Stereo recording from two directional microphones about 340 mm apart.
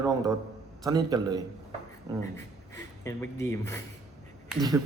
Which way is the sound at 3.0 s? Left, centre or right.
Centre.